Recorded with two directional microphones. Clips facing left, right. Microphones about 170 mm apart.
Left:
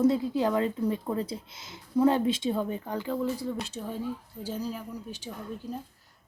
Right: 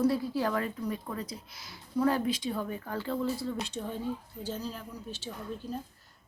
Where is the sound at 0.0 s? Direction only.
20° left (ahead or behind).